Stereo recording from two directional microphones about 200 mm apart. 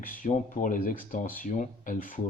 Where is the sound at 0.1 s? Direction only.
40° left (ahead or behind).